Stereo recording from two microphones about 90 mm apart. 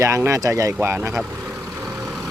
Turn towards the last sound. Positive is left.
turn(degrees=-25)  # may be behind; listen again after turning